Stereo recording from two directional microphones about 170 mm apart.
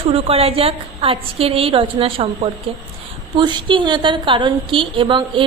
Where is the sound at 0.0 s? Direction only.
35° right (ahead or behind).